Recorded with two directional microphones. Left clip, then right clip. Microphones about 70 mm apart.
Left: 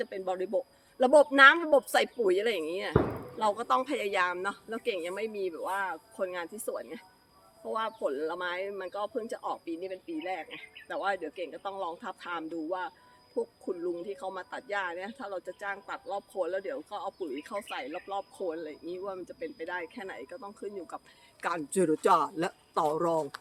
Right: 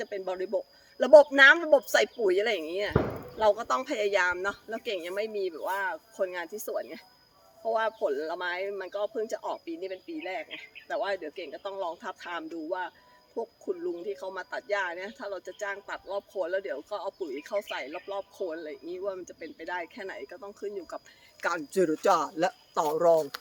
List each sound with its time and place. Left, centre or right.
0.0 s speech: left